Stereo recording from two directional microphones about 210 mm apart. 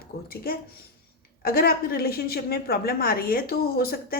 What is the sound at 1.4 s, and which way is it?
A woman's voice, 45° left (ahead or behind).